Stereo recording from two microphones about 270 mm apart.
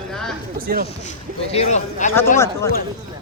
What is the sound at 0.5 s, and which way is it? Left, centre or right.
Speech, right.